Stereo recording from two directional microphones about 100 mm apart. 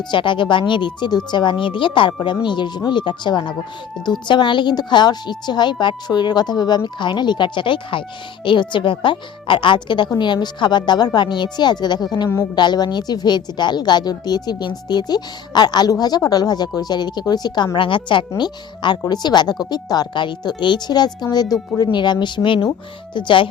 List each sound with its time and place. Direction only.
0.1 s a woman's voice: 55° left (ahead or behind)
17.7 s a woman's voice: 55° left (ahead or behind)